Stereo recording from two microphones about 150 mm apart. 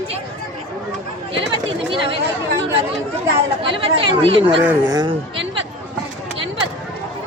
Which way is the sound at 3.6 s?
35° right (ahead or behind).